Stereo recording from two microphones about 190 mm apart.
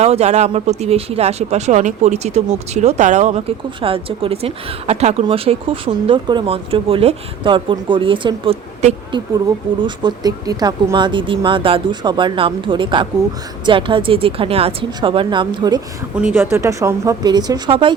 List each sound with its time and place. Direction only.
0.0 s speech: 35° right (ahead or behind)
16.1 s speech: 10° right (ahead or behind); by 17.9 s 25° right (ahead or behind)